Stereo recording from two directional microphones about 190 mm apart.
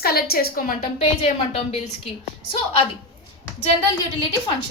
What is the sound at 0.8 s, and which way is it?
A woman's voice, 30° left (ahead or behind).